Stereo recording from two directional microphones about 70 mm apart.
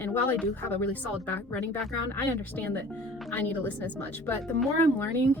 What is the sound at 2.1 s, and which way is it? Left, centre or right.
A woman's voice, left.